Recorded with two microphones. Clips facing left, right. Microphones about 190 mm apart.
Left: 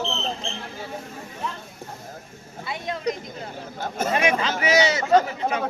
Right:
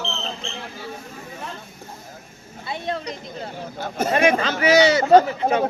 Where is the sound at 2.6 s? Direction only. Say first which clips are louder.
Right 3 dB; 30° right (ahead or behind).